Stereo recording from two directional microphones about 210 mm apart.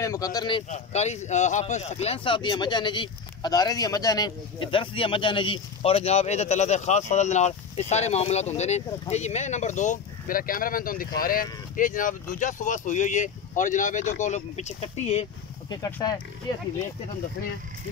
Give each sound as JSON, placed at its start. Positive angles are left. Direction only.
{"t": 0.0, "sound": "a man's voice", "side_deg": 15}
{"t": 15.7, "sound": "a man's voice", "side_deg": 20}